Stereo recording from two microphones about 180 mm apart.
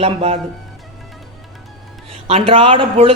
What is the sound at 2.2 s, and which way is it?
Speech, 30° right (ahead or behind).